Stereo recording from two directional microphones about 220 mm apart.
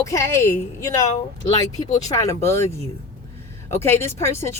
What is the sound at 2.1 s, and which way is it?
Speech, 15° left (ahead or behind).